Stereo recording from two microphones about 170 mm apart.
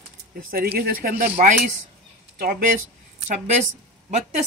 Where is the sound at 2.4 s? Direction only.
60° right (ahead or behind).